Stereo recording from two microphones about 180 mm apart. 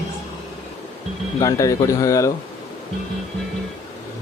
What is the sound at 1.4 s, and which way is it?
Speech, 20° left (ahead or behind).